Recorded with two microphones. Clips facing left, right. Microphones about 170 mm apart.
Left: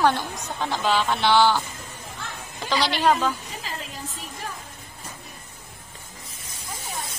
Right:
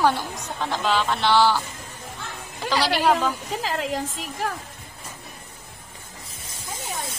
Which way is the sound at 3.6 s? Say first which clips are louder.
Right 9 dB; 90° right.